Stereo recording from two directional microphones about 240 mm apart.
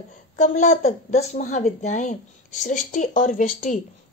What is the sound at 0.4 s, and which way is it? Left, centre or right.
A woman's voice, left.